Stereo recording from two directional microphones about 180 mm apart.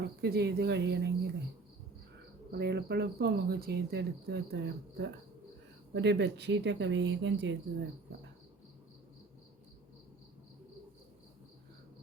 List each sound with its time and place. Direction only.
0.0 s speech: 65° right (ahead or behind)
2.5 s speech: 65° right (ahead or behind); by 7.5 s 85° right